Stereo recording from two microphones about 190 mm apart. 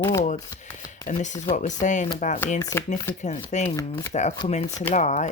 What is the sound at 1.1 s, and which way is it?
Speech, 40° left (ahead or behind).